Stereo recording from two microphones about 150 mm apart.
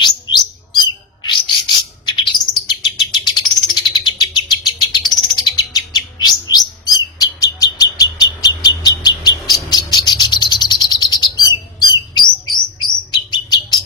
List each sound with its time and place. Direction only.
0.3 s chirp: 30° left (ahead or behind)
1.2 s bird: 30° left (ahead or behind)
13.3 s bird: 30° left (ahead or behind)